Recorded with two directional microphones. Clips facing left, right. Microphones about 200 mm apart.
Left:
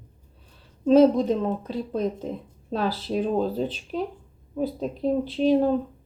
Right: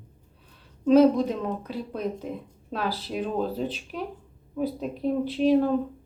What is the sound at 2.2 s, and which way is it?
A woman's voice, 30° left (ahead or behind).